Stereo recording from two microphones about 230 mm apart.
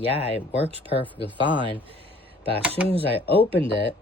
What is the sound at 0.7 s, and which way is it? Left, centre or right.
Speech, right.